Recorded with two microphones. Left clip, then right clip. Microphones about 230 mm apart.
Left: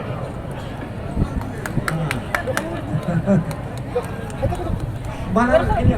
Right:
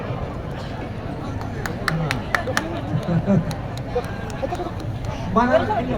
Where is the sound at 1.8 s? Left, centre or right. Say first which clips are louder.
Even; right.